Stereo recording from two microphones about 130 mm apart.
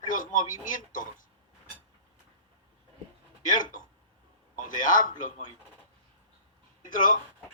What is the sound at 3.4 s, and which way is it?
A man's voice, 90° left.